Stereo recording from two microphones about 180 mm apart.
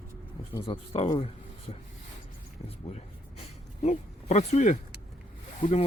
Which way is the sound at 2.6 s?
35° left (ahead or behind).